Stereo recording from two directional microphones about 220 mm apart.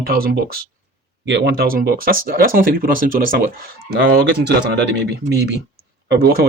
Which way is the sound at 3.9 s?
50° right (ahead or behind).